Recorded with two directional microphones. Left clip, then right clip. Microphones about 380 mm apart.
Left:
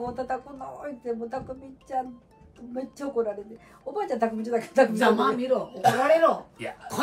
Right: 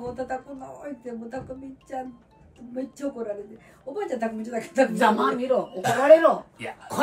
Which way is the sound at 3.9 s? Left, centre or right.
Centre.